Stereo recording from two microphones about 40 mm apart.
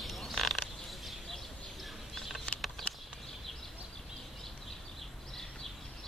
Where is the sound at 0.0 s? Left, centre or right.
Centre.